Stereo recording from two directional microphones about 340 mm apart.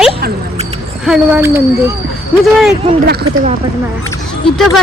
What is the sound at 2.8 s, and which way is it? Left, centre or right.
Speech, right.